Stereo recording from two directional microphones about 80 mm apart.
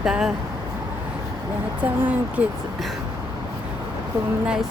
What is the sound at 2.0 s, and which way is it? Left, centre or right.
Speech, centre.